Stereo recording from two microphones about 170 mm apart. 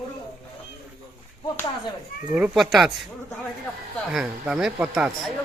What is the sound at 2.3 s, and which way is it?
Speech, 5° right (ahead or behind).